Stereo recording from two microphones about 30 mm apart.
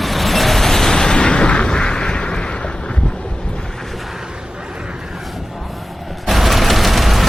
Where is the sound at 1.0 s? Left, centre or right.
Left.